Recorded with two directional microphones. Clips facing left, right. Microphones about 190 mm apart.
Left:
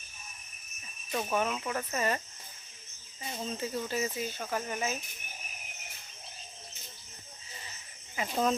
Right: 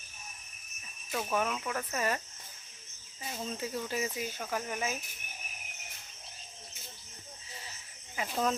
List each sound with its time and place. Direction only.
1.2 s speech: 5° left (ahead or behind)
3.2 s speech: 5° right (ahead or behind)
8.1 s speech: centre (ahead or behind)